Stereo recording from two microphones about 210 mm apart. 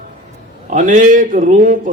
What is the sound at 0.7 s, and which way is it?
Speech, 35° right (ahead or behind).